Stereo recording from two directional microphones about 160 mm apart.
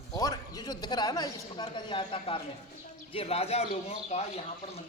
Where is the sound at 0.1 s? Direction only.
25° left (ahead or behind); by 4.2 s 40° left (ahead or behind).